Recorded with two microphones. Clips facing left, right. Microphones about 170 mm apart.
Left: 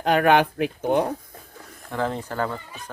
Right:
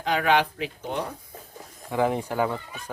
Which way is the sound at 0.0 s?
55° left (ahead or behind).